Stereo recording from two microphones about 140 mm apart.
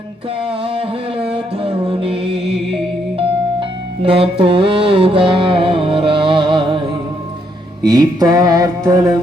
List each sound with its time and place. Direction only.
0.4 s music: 40° right (ahead or behind)
7.8 s mantra: 30° right (ahead or behind)